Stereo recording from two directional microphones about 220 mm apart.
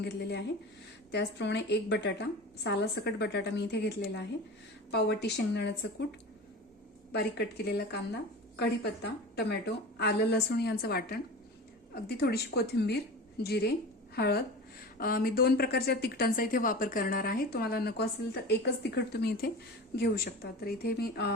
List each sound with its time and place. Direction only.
0.0 s a woman's voice: 50° left (ahead or behind)